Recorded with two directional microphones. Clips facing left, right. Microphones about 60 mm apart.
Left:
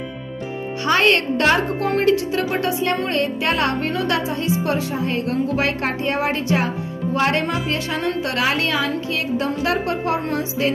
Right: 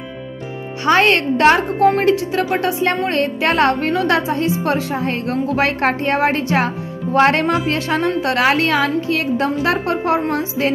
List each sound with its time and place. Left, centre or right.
0.8 s a woman's voice: right
2.9 s a woman's voice: right
3.4 s a woman's voice: right
3.8 s a woman's voice: right